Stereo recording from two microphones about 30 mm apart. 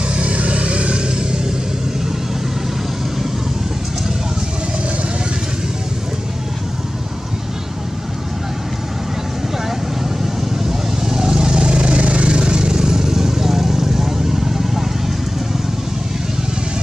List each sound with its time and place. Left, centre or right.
0.1 s vehicle: right
11.0 s vehicle: right